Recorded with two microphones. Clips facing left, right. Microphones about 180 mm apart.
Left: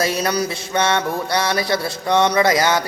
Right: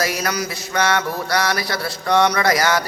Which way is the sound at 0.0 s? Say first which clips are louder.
Left 3 dB; 25° left (ahead or behind).